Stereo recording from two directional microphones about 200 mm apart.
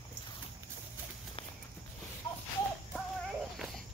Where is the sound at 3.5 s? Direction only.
Centre (ahead or behind).